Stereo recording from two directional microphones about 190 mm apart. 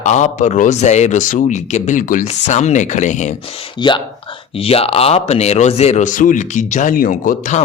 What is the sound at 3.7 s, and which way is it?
Speech, 25° left (ahead or behind).